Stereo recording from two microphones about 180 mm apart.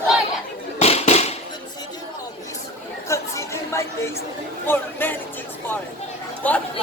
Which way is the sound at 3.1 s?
15° left (ahead or behind).